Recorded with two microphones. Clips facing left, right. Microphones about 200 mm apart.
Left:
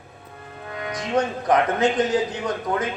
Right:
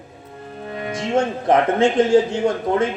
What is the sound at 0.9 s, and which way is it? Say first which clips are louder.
A man's voice: right 3 dB; 25° right (ahead or behind).